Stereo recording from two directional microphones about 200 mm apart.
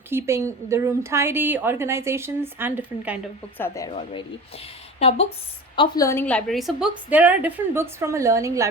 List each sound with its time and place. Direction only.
0.1 s a woman's voice: 15° right (ahead or behind)
3.6 s speech: 15° left (ahead or behind)
3.9 s a woman's voice: 30° left (ahead or behind); by 8.6 s 15° right (ahead or behind)